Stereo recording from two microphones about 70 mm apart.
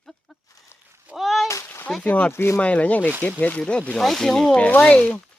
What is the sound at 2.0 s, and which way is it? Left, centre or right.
Speech, left.